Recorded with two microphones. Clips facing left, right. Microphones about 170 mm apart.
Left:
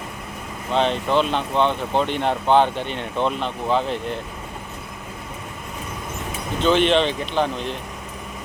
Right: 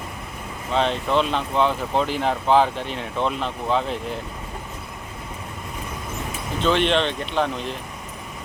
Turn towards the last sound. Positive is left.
turn(degrees=0)  # may be behind; listen again after turning